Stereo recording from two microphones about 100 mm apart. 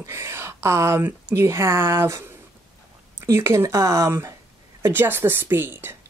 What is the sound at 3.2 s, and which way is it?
Speech, 25° right (ahead or behind).